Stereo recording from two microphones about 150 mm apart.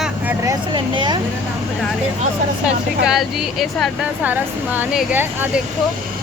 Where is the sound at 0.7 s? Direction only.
30° right (ahead or behind).